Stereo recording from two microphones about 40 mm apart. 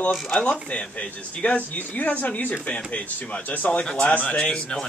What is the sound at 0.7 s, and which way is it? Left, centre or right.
Speech, left.